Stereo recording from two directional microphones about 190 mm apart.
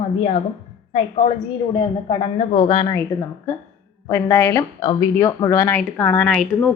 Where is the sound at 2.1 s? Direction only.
30° left (ahead or behind).